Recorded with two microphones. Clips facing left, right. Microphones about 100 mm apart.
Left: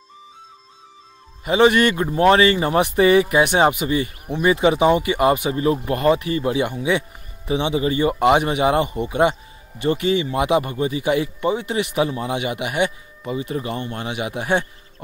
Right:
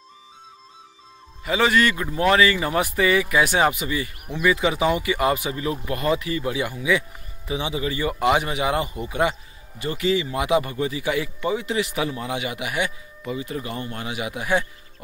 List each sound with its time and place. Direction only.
1.4 s a man's voice: 25° left (ahead or behind)